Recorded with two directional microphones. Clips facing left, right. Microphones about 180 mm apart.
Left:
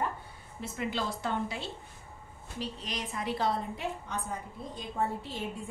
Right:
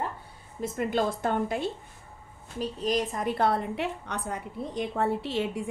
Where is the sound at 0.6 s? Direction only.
50° right (ahead or behind).